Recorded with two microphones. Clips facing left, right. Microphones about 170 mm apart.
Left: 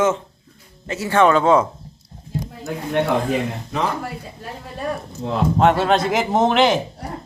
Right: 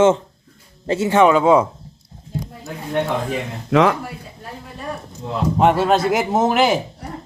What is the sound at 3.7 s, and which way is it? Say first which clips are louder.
Speech: right 12 dB; 90° right.